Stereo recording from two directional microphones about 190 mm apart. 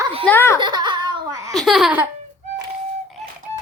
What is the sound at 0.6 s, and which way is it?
Laughter, 25° right (ahead or behind).